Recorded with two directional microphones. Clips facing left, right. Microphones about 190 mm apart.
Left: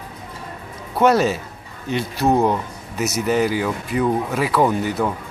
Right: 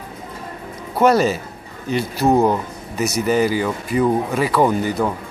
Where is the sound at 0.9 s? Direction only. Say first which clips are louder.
Right 1 dB; centre (ahead or behind).